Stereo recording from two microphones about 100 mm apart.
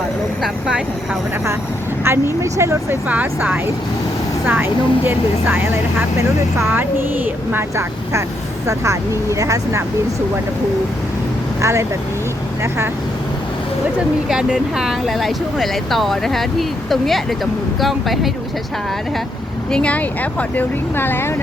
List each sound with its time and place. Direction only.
2.0 s speech: 25° right (ahead or behind)
3.1 s speech: 15° right (ahead or behind); by 9.8 s 30° right (ahead or behind)
11.6 s speech: 30° right (ahead or behind)
14.3 s speech: 5° right (ahead or behind)
19.7 s speech: 15° left (ahead or behind)